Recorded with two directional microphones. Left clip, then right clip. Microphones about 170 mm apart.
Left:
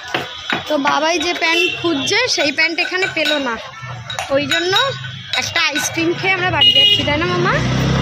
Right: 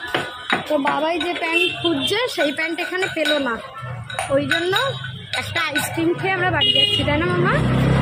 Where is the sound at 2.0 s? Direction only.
15° left (ahead or behind).